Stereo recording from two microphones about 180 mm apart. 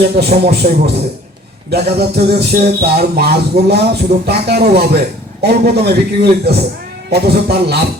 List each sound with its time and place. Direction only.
0.0 s music: 60° right (ahead or behind)